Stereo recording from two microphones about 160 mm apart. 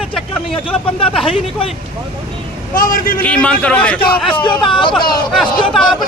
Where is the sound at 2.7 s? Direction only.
60° left (ahead or behind).